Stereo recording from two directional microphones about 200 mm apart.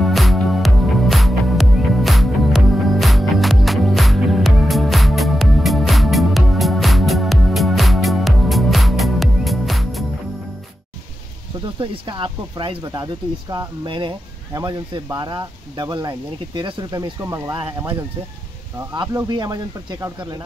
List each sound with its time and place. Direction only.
0.0 s music: centre (ahead or behind)
11.6 s speech: 25° right (ahead or behind)
18.9 s speech: 20° right (ahead or behind)